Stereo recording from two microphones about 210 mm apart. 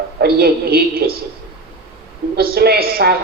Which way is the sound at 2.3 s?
45° right (ahead or behind).